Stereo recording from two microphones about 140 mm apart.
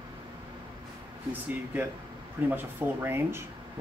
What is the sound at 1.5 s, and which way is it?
Speech, 15° right (ahead or behind).